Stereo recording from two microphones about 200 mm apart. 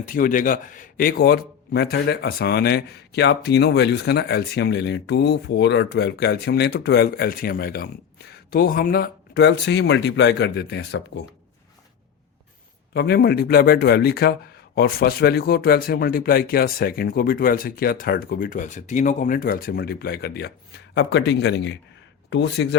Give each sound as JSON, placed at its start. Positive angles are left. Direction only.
{"t": 0.0, "sound": "a man's voice", "side_deg": 40}
{"t": 12.9, "sound": "a man's voice", "side_deg": 55}